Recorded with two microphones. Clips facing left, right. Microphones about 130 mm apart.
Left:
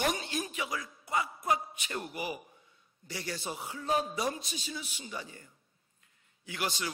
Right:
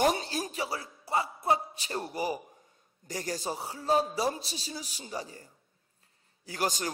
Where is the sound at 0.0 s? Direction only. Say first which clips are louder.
Right 5 dB; 35° right (ahead or behind).